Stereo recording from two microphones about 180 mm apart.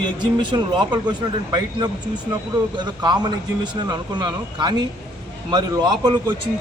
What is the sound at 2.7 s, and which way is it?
Speech, 25° right (ahead or behind).